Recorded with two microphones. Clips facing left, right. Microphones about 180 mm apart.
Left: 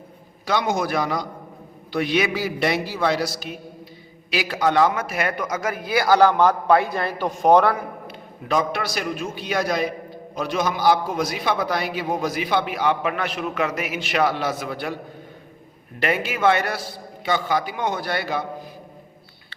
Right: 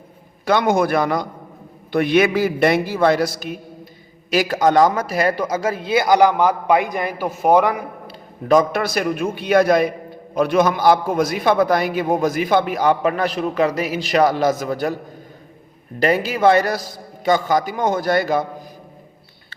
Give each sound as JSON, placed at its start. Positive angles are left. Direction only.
{"t": 0.4, "sound": "a man's voice", "side_deg": -55}
{"t": 8.0, "sound": "a man's voice", "side_deg": -45}
{"t": 16.0, "sound": "a man's voice", "side_deg": -35}